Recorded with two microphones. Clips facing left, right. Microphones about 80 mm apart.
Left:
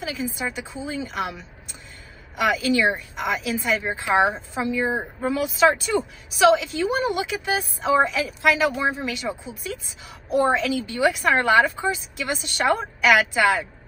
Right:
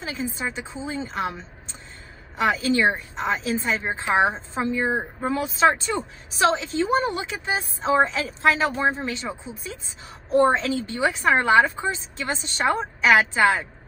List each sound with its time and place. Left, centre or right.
0.0 s a woman's voice: right